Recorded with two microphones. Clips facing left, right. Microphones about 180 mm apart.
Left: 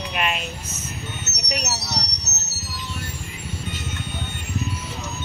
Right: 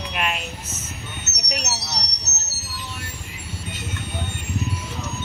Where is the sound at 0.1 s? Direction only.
Centre (ahead or behind).